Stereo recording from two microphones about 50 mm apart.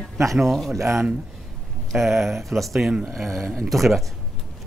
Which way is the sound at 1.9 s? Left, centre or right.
Centre.